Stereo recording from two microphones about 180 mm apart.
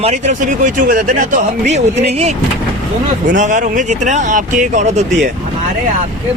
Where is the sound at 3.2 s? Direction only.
45° right (ahead or behind).